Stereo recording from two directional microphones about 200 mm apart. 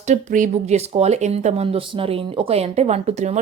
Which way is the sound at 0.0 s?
35° right (ahead or behind).